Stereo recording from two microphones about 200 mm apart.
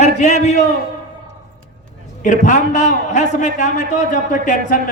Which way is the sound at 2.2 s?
40° left (ahead or behind).